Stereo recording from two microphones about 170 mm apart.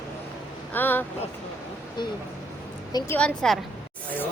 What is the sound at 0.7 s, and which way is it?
Speech, 10° left (ahead or behind).